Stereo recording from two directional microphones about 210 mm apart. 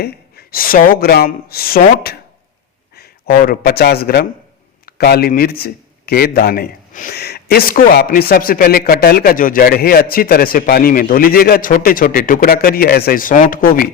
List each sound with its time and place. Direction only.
0.0 s a man's voice: 45° left (ahead or behind)